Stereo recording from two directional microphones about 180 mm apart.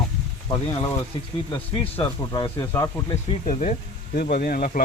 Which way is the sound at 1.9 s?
25° left (ahead or behind).